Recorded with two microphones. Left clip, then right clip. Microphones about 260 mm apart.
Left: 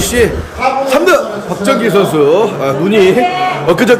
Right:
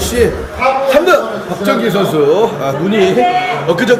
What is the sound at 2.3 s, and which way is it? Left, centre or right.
A man's voice, centre.